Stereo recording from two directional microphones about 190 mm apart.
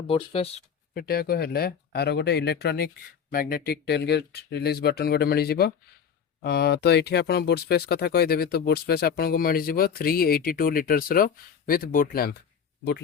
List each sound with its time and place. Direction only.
0.1 s speech: 30° left (ahead or behind)
0.9 s speech: 55° left (ahead or behind)